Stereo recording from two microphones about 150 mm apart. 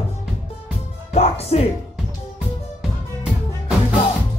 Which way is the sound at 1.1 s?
45° left (ahead or behind).